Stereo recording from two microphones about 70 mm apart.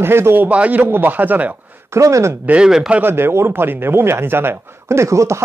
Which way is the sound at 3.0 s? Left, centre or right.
Right.